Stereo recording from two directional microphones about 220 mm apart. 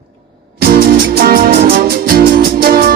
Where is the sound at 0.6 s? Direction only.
40° right (ahead or behind).